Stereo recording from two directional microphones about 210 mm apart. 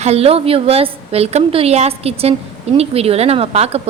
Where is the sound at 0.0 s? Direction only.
30° right (ahead or behind).